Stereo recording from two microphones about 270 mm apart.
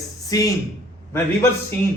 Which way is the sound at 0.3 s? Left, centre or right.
Centre.